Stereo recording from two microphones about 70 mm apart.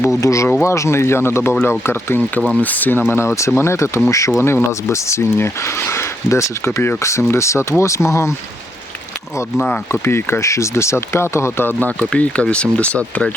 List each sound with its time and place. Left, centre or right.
0.2 s speech: left
2.6 s speech: left
3.1 s speech: left
9.9 s speech: left
11.8 s speech: centre